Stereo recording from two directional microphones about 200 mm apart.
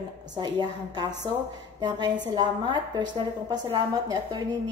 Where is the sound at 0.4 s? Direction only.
20° right (ahead or behind).